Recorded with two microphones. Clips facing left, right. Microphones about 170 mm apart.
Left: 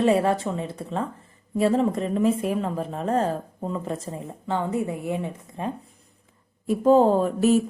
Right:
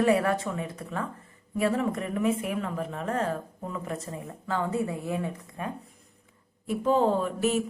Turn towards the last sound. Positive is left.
turn(degrees=40)  # may be behind; listen again after turning